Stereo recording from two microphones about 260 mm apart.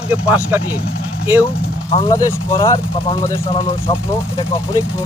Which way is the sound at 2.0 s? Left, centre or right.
Centre.